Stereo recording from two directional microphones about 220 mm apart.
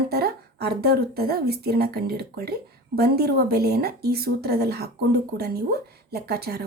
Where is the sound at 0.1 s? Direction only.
45° right (ahead or behind).